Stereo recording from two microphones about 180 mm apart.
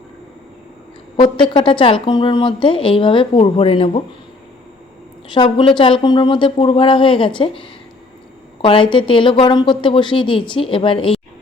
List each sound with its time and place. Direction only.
1.1 s speech: 25° left (ahead or behind)
5.3 s speech: 25° left (ahead or behind)